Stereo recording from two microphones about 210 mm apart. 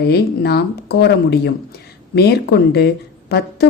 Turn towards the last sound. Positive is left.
turn(degrees=50)  # may be behind; listen again after turning